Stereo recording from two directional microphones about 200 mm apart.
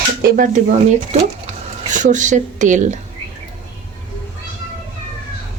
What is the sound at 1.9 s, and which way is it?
Speech, 40° right (ahead or behind).